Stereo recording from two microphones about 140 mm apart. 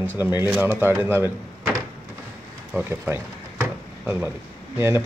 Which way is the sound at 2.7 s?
20° right (ahead or behind).